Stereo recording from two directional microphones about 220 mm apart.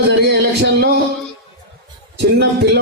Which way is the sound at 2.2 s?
50° right (ahead or behind).